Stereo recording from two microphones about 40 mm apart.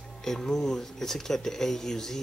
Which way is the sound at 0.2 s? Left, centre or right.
Centre.